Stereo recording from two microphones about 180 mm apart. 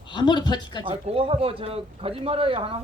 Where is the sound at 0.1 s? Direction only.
25° left (ahead or behind).